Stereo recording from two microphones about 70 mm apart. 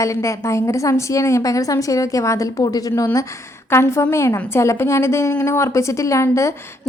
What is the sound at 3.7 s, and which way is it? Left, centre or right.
A woman's voice, left.